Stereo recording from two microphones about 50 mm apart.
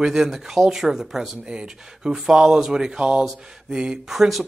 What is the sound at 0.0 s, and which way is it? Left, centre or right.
Speech, centre.